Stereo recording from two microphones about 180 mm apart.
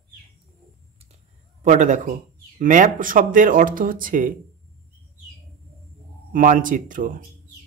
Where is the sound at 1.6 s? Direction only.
45° right (ahead or behind).